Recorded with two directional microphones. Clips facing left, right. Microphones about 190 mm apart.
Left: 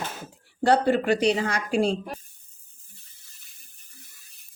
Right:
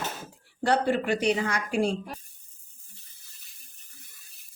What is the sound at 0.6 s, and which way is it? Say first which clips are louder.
Speech: left 4 dB; 35° left (ahead or behind).